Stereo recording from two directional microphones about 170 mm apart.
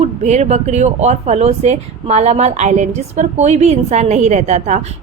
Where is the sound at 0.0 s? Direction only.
40° right (ahead or behind).